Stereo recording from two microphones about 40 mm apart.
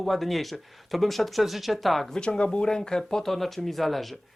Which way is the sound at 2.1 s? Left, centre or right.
Left.